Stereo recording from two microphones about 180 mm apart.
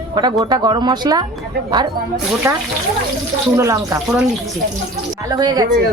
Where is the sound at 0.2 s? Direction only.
25° right (ahead or behind).